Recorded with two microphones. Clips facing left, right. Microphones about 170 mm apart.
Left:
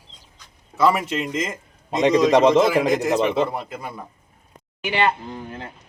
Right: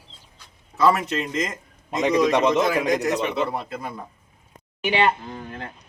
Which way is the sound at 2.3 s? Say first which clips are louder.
Left 5 dB; 30° left (ahead or behind).